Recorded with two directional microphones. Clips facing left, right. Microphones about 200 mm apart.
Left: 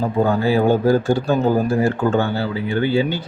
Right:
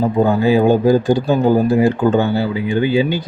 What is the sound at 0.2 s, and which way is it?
Speech, 15° right (ahead or behind).